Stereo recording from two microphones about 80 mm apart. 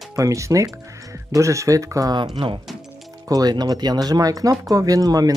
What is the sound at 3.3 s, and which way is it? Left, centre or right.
Speech, right.